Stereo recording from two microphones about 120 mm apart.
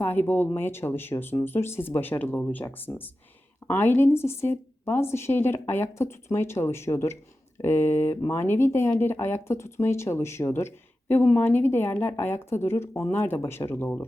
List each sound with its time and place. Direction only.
0.0 s speech: 15° left (ahead or behind)